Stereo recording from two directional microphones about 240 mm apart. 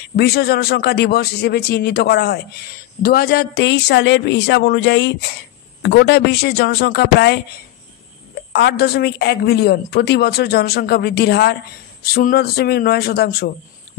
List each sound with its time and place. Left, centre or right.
0.1 s a woman's voice: left
8.5 s a woman's voice: left